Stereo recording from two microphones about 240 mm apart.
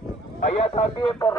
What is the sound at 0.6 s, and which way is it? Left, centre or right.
Speech, left.